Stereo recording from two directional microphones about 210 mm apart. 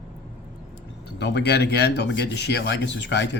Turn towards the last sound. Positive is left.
turn(degrees=60)  # may be behind; listen again after turning